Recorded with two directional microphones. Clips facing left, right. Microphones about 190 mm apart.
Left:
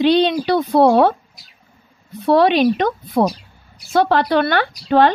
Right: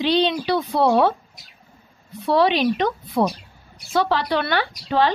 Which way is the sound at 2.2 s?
50° left (ahead or behind).